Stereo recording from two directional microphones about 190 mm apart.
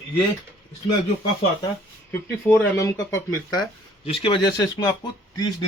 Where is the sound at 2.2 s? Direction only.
15° left (ahead or behind).